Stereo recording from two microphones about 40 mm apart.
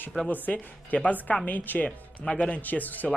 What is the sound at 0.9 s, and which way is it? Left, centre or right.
A woman's voice, left.